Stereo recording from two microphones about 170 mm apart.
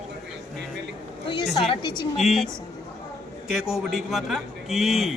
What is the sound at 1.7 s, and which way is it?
Speech, 25° left (ahead or behind).